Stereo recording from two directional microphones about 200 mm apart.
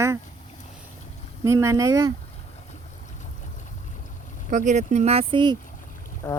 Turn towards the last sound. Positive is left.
turn(degrees=15)  # may be behind; listen again after turning